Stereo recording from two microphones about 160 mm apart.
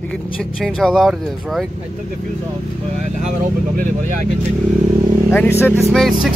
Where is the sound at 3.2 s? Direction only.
50° right (ahead or behind).